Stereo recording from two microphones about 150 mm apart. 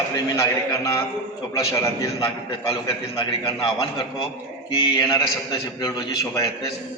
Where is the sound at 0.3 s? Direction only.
20° left (ahead or behind).